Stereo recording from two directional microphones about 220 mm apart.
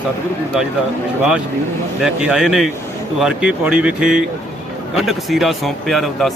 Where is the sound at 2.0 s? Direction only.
Centre (ahead or behind).